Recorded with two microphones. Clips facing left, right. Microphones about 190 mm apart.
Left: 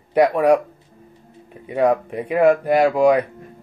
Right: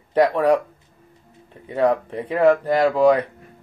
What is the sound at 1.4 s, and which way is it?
Speech, 15° left (ahead or behind).